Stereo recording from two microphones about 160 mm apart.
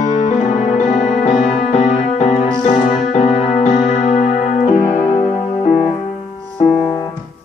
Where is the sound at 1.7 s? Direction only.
50° left (ahead or behind).